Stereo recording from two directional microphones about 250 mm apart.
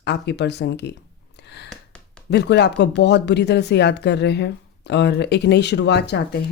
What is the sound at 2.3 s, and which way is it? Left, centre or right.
Speech, left.